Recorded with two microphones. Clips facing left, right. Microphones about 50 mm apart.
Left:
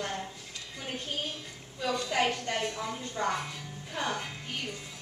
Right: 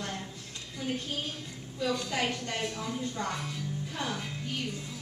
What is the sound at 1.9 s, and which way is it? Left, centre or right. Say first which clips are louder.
A woman's voice: left 3 dB; left.